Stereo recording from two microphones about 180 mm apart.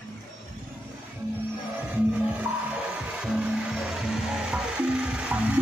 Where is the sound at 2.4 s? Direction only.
5° right (ahead or behind).